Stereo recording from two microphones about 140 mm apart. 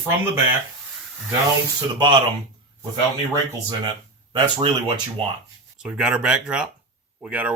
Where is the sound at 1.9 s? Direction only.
30° right (ahead or behind).